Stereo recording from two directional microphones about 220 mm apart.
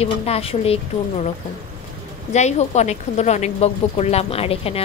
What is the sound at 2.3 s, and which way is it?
A woman's voice, 30° left (ahead or behind).